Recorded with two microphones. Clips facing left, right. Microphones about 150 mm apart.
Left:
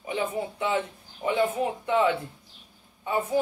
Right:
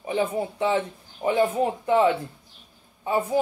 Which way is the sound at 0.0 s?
30° right (ahead or behind).